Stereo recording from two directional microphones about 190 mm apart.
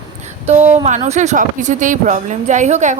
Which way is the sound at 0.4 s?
35° right (ahead or behind).